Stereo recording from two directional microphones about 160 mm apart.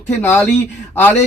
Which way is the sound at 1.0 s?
10° left (ahead or behind).